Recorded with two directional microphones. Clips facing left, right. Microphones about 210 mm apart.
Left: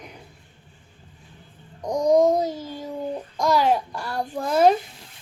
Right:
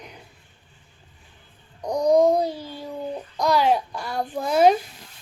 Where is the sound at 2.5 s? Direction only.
45° left (ahead or behind).